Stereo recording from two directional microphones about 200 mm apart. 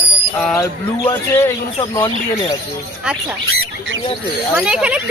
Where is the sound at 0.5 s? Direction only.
15° left (ahead or behind).